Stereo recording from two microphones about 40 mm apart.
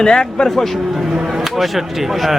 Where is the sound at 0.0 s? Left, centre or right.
Centre.